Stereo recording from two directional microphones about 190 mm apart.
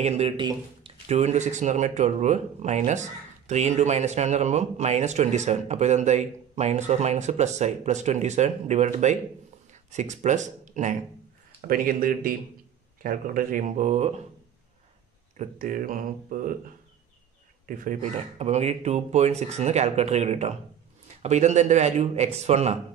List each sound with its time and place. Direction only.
0.0 s speech: 35° right (ahead or behind)
15.3 s speech: 45° right (ahead or behind)
17.6 s speech: 45° right (ahead or behind)